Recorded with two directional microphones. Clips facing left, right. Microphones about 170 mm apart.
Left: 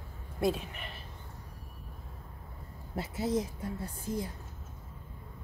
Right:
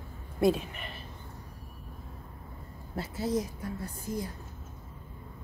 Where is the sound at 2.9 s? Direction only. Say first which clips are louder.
Right 1 dB; 20° left (ahead or behind).